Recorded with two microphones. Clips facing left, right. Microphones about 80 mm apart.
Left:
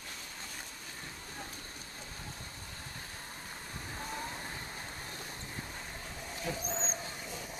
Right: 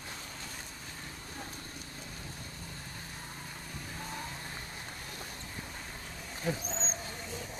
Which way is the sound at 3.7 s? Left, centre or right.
Left.